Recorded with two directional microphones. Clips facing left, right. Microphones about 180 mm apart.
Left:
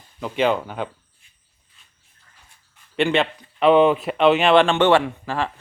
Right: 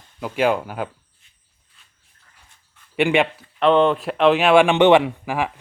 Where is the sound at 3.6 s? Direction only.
5° left (ahead or behind).